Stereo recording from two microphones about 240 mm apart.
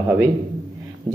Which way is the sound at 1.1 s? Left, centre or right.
Centre.